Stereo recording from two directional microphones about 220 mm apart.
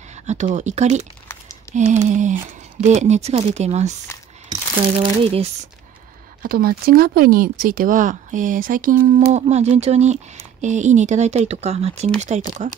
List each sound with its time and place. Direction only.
0.1 s speech: 30° right (ahead or behind)
1.3 s typing: 10° left (ahead or behind)
1.8 s speech: 35° right (ahead or behind)
6.4 s speech: 40° right (ahead or behind)